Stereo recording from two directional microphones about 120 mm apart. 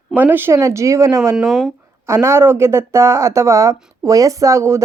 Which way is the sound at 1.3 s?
Centre (ahead or behind).